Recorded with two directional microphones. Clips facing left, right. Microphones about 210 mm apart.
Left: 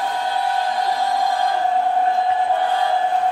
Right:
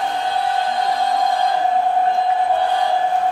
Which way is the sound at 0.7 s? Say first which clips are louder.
Right 1 dB; 20° right (ahead or behind).